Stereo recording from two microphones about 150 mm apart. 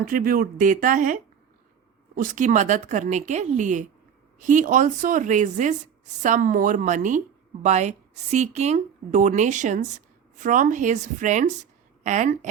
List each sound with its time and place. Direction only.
0.0 s a woman's voice: 70° right (ahead or behind)